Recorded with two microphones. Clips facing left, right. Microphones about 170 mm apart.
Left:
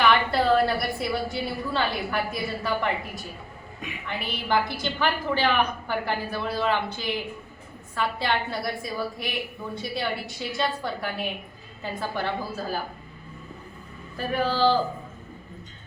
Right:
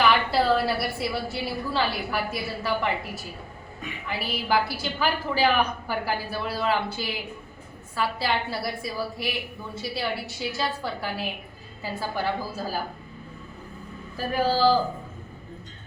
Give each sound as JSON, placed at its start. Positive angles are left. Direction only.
{"t": 0.0, "sound": "a woman's voice", "side_deg": 0}
{"t": 14.2, "sound": "speech", "side_deg": -5}